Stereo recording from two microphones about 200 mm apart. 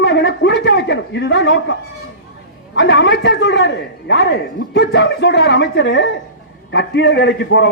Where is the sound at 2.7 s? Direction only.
60° left (ahead or behind).